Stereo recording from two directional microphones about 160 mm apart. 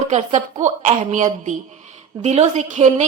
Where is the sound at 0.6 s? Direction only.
50° right (ahead or behind).